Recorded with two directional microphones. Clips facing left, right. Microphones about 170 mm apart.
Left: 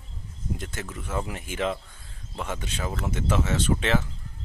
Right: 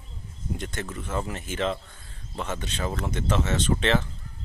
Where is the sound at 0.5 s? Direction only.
5° left (ahead or behind).